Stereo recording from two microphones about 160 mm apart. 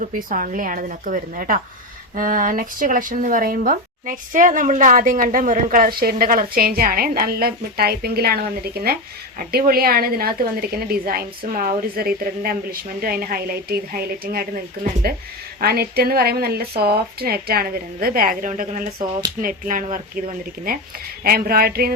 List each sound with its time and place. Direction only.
0.0 s a woman's voice: 60° right (ahead or behind)
21.2 s a woman's voice: 70° right (ahead or behind)